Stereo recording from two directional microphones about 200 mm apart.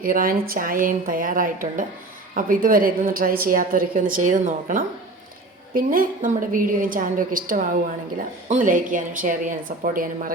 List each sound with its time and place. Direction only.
0.0 s a woman's voice: 45° right (ahead or behind)